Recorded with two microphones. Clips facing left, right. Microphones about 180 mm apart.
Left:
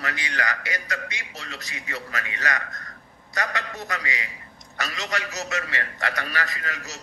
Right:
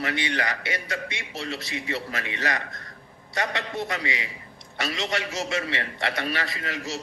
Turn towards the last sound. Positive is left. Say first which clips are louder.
# right 4 dB
turn(degrees=-30)  # may be behind; listen again after turning